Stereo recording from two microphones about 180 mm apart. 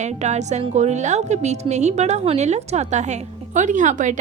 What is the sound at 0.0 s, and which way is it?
A woman's voice, 40° right (ahead or behind).